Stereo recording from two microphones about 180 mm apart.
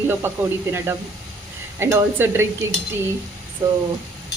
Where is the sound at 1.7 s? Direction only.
15° right (ahead or behind).